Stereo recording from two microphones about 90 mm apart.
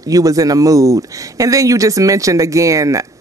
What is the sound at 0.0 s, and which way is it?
Speech, 40° right (ahead or behind).